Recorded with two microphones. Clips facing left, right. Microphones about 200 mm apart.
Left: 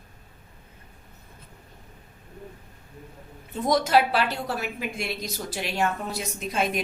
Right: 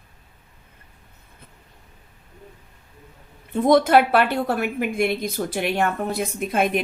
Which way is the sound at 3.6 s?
55° right (ahead or behind).